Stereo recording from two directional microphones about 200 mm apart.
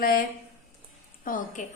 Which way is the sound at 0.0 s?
45° left (ahead or behind).